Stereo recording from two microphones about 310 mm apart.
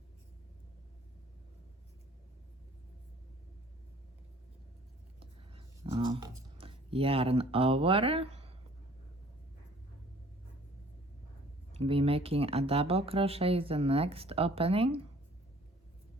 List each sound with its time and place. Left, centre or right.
5.2 s a sound: centre
6.6 s speech: centre
11.7 s speech: centre